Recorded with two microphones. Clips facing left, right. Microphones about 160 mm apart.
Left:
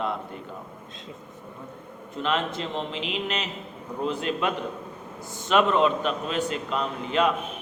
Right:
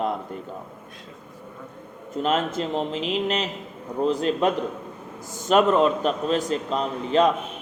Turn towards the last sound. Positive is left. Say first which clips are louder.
# right 4 dB
turn(degrees=-35)  # may be behind; listen again after turning